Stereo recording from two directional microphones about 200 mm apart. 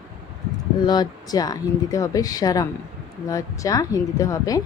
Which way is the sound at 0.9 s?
20° left (ahead or behind).